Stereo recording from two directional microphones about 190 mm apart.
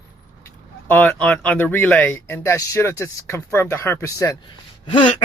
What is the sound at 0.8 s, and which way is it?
Speech, 10° left (ahead or behind).